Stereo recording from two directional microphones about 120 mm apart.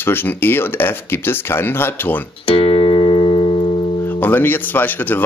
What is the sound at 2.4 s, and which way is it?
Music, 50° left (ahead or behind).